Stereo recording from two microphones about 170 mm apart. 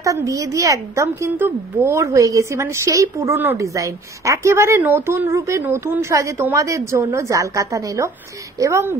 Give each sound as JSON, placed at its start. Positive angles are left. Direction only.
{"t": 0.0, "sound": "a woman's voice", "side_deg": -20}